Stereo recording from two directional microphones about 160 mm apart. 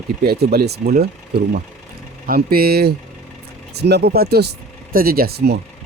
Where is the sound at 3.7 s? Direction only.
90° right.